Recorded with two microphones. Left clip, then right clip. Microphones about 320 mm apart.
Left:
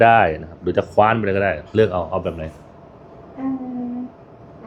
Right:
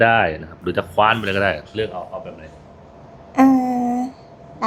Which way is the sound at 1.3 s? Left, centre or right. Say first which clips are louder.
Even; centre.